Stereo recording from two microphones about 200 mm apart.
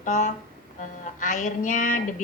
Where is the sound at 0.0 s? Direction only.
35° left (ahead or behind).